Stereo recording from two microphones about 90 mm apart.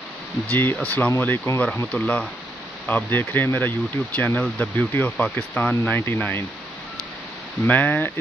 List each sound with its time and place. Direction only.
0.5 s speech: 20° left (ahead or behind)
1.1 s speech: 30° left (ahead or behind)
1.9 s speech: 15° left (ahead or behind)
7.6 s speech: 20° left (ahead or behind)